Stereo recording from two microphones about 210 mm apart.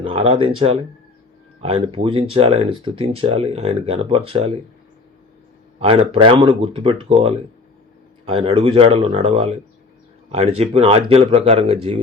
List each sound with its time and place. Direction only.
0.0 s speech: 25° right (ahead or behind)
5.8 s speech: 25° right (ahead or behind)